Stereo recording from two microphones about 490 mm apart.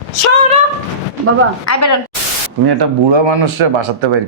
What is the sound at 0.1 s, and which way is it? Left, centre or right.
Speech, left.